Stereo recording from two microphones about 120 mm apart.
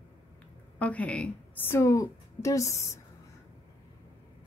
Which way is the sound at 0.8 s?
10° left (ahead or behind).